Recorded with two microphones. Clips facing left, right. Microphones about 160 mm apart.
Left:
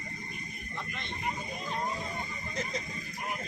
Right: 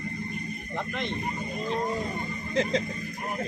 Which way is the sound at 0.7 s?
90° right.